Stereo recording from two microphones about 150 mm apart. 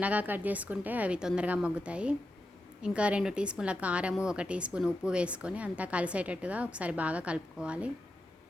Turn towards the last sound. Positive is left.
turn(degrees=-5)  # may be behind; listen again after turning